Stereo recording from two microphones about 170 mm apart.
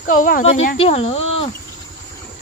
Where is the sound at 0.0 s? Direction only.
50° left (ahead or behind).